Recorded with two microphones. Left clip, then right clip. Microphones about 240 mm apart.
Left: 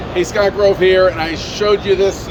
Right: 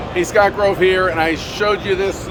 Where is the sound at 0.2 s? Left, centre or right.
Centre.